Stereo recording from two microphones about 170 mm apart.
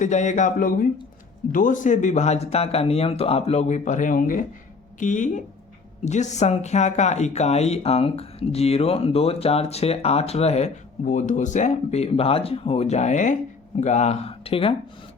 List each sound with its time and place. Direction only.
0.0 s speech: 45° left (ahead or behind)